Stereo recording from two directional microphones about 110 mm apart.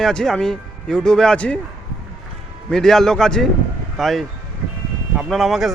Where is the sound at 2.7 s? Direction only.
5° left (ahead or behind).